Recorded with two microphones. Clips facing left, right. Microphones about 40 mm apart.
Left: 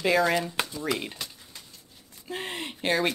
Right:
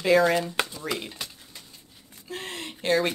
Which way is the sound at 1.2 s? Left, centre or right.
Centre.